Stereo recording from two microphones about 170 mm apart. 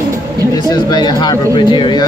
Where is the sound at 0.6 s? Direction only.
25° left (ahead or behind).